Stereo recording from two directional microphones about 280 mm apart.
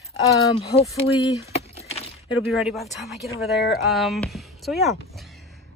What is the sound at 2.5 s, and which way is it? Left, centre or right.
Speech, centre.